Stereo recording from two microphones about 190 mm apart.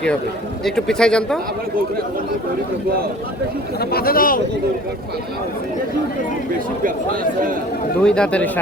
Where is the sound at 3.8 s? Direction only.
55° left (ahead or behind).